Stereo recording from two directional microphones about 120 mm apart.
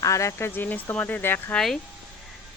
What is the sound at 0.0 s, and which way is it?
A woman's voice, 25° left (ahead or behind).